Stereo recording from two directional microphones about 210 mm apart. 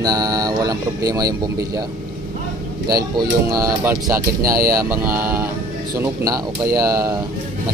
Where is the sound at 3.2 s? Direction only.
15° right (ahead or behind).